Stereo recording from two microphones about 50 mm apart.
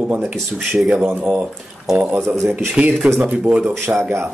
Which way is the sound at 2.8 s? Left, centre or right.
Right.